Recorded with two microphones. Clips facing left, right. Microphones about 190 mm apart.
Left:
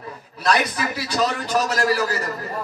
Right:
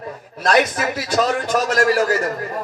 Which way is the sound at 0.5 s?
55° right (ahead or behind).